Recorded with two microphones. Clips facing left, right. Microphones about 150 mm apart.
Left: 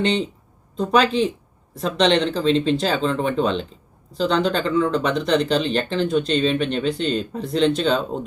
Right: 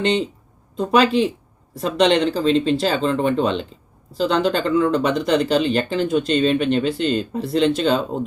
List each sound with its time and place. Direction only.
0.8 s speech: 5° right (ahead or behind)